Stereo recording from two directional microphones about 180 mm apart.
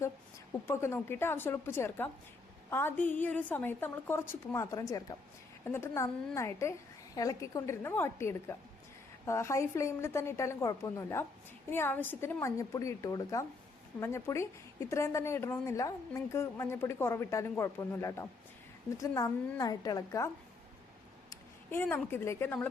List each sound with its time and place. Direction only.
0.7 s a woman's voice: 15° left (ahead or behind)